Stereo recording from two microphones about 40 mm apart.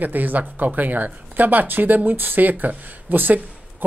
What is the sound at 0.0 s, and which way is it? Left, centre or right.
Speech, right.